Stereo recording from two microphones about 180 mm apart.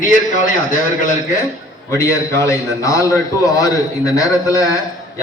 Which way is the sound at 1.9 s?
15° left (ahead or behind).